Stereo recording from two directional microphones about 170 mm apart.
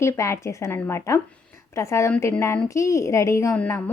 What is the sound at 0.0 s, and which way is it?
Speech, 15° left (ahead or behind).